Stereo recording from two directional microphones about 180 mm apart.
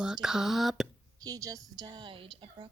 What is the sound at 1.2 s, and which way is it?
A woman's voice, 20° right (ahead or behind).